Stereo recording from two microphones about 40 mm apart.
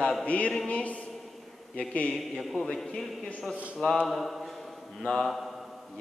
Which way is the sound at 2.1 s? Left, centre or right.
Centre.